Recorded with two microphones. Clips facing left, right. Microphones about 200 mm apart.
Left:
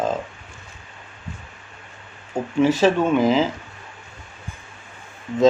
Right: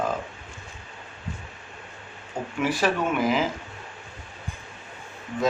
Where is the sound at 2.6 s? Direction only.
25° left (ahead or behind).